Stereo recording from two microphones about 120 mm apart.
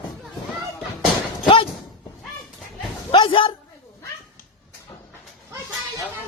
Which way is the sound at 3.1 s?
50° left (ahead or behind).